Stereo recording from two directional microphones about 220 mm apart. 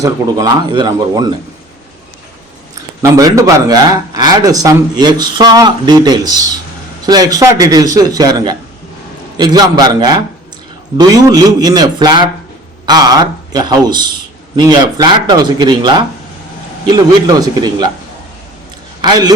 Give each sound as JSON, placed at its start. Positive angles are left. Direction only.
{"t": 0.0, "sound": "speech", "side_deg": -15}
{"t": 3.0, "sound": "a man's voice", "side_deg": -15}
{"t": 19.0, "sound": "speech", "side_deg": -20}